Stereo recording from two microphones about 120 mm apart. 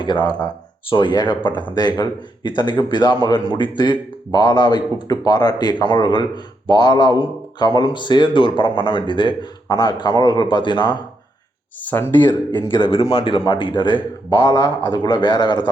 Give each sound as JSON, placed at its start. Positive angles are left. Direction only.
{"t": 0.0, "sound": "speech", "side_deg": 40}
{"t": 11.8, "sound": "speech", "side_deg": 15}
{"t": 12.7, "sound": "speech", "side_deg": 45}